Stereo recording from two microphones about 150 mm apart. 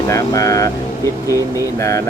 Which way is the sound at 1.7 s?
20° left (ahead or behind).